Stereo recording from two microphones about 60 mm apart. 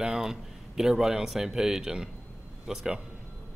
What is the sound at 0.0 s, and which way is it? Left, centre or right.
A man's voice, centre.